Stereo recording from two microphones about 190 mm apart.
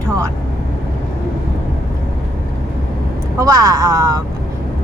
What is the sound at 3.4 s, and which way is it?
Speech, 20° right (ahead or behind).